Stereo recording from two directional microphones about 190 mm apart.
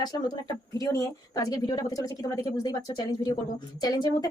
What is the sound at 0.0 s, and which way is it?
Speech, 20° left (ahead or behind).